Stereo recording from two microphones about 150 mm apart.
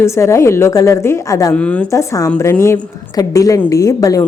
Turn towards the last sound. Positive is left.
turn(degrees=25)  # may be behind; listen again after turning